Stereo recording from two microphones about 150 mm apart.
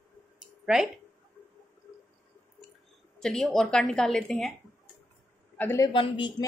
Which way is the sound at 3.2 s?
5° left (ahead or behind).